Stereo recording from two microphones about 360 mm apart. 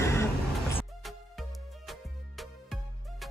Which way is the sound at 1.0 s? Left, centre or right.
Centre.